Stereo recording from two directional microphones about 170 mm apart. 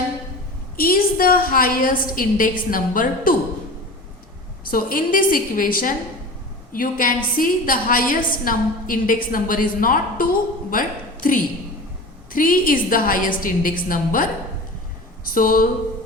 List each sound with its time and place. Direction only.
0.8 s a woman's voice: 60° left (ahead or behind)
4.7 s a woman's voice: 55° left (ahead or behind)